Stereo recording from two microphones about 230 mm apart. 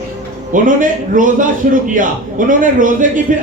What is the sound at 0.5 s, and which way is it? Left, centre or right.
A woman's voice, right.